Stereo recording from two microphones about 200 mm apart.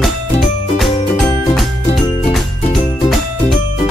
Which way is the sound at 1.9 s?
35° left (ahead or behind).